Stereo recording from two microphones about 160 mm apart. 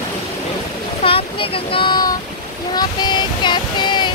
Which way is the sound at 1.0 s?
35° left (ahead or behind).